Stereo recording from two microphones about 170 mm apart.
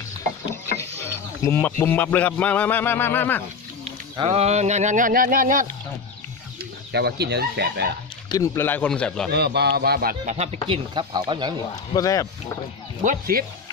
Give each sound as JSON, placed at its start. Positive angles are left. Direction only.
{"t": 1.4, "sound": "speech", "side_deg": 15}
{"t": 4.2, "sound": "speech", "side_deg": -35}
{"t": 6.9, "sound": "speech", "side_deg": -75}
{"t": 8.3, "sound": "speech", "side_deg": 15}
{"t": 9.3, "sound": "speech", "side_deg": -75}
{"t": 10.3, "sound": "speech", "side_deg": -40}
{"t": 11.9, "sound": "speech", "side_deg": 20}
{"t": 13.0, "sound": "speech", "side_deg": -55}